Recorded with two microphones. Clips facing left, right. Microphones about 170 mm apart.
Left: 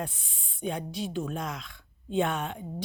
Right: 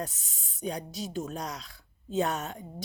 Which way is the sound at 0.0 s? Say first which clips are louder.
Left 1 dB; 40° right (ahead or behind).